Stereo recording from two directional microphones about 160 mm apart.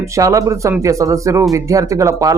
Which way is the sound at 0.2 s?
20° right (ahead or behind).